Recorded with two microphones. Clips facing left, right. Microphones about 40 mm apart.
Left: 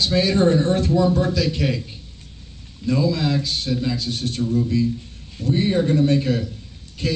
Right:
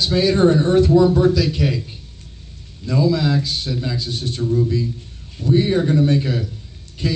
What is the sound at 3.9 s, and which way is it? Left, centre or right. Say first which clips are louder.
A man's voice: even; right.